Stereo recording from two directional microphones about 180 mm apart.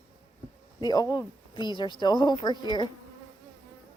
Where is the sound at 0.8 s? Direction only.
25° left (ahead or behind).